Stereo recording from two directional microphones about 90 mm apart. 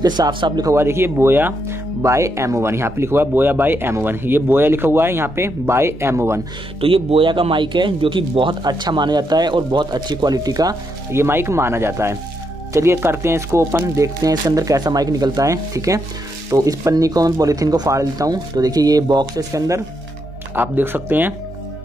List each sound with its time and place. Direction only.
0.0 s speech: 50° right (ahead or behind)
0.7 s speech: 30° right (ahead or behind)
6.8 s speech: 85° right; by 10.8 s 45° right (ahead or behind)
11.1 s speech: 25° right (ahead or behind)
20.5 s speech: 25° right (ahead or behind)